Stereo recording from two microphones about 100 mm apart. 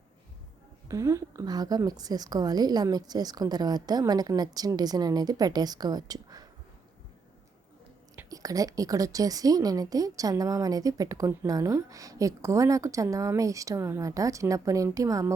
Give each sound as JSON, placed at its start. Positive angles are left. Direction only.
{"t": 0.9, "sound": "a woman's voice", "side_deg": -30}
{"t": 8.3, "sound": "a woman's voice", "side_deg": -35}